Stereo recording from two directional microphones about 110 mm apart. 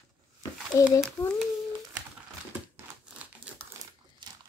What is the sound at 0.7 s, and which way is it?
Speech, 25° left (ahead or behind).